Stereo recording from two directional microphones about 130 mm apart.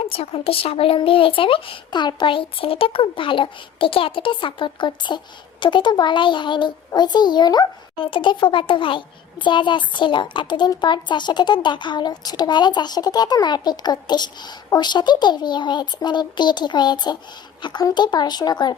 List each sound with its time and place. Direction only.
0.0 s a child's voice: 45° left (ahead or behind)